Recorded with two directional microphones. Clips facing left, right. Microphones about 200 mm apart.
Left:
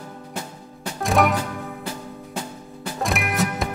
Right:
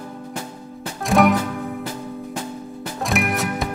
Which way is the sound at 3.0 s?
Centre (ahead or behind).